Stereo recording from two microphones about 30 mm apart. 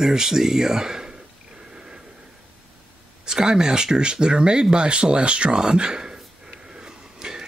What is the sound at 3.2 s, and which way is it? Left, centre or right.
Speech, right.